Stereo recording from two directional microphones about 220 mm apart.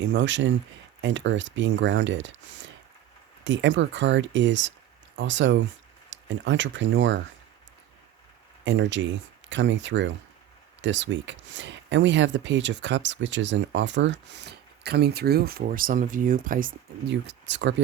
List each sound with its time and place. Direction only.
0.0 s speech: 55° right (ahead or behind)
8.6 s speech: 55° right (ahead or behind)